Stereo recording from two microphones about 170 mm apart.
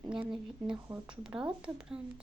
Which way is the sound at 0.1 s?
5° right (ahead or behind).